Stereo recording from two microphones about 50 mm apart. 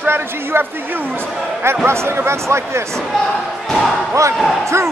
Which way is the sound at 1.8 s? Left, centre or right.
Right.